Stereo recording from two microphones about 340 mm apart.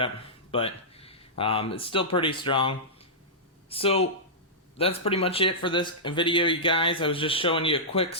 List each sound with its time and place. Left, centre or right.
0.5 s speech: centre